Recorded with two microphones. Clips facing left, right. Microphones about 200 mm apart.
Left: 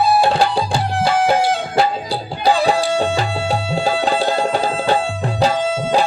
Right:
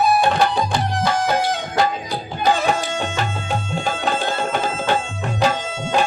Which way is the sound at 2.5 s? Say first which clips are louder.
Left 4 dB; 35° left (ahead or behind).